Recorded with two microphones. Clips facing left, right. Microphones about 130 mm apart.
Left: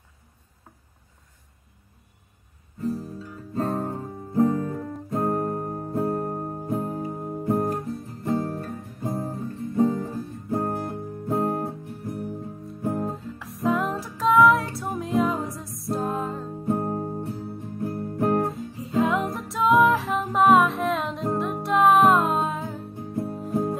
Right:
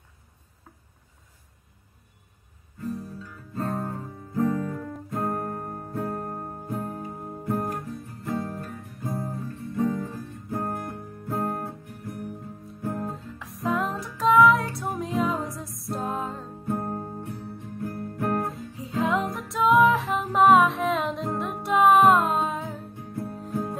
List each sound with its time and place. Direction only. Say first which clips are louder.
2.8 s guitar: left 4 dB; 35° left (ahead or behind)
3.3 s music: left 4 dB; 25° left (ahead or behind)
13.1 s music: left 3 dB; centre (ahead or behind)
16.6 s music: left 4 dB; 25° left (ahead or behind)
18.5 s music: left 4 dB; centre (ahead or behind)
22.9 s music: left 4 dB; 30° left (ahead or behind)